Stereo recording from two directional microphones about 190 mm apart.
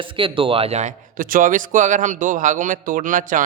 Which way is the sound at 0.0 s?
25° right (ahead or behind).